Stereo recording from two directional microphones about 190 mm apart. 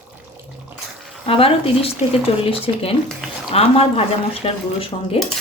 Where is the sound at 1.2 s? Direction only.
30° left (ahead or behind).